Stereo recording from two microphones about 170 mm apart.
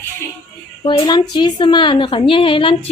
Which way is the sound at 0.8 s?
25° left (ahead or behind).